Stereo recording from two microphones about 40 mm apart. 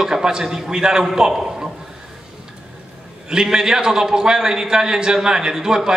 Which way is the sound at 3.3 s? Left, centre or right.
Centre.